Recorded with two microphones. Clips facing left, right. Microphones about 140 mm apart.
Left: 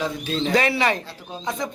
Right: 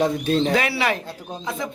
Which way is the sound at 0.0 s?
50° right (ahead or behind).